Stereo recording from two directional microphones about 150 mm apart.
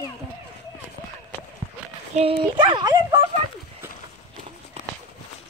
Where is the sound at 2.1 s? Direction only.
40° right (ahead or behind).